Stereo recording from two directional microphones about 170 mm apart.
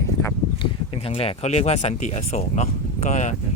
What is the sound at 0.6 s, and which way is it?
Speech, 35° left (ahead or behind).